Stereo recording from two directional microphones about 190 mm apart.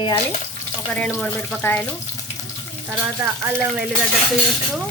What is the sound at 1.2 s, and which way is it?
Speech, 5° left (ahead or behind).